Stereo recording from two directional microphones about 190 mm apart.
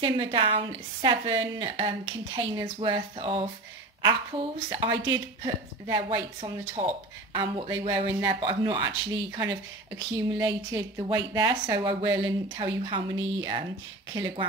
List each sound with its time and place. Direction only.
0.0 s a woman's voice: 25° right (ahead or behind)